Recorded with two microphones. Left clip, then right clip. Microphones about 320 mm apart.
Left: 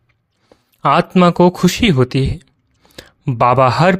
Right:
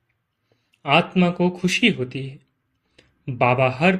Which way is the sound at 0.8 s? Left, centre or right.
Left.